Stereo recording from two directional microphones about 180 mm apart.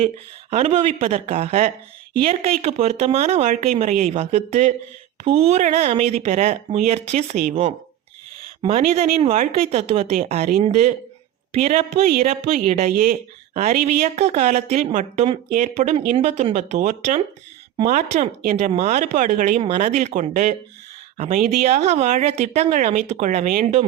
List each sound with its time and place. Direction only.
0.5 s speech: 35° right (ahead or behind)
8.6 s speech: 35° right (ahead or behind)
12.5 s speech: 50° right (ahead or behind)
13.5 s speech: 35° right (ahead or behind)